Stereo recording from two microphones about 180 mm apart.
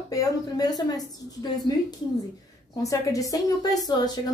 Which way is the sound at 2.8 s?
20° left (ahead or behind).